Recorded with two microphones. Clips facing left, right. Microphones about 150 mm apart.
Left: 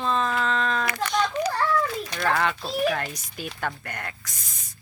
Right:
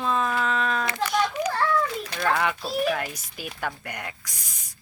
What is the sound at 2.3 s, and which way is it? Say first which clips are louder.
Speech: even; 15° right (ahead or behind).